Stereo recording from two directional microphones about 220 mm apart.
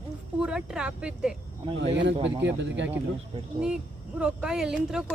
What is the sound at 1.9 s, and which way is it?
Speech, 55° right (ahead or behind).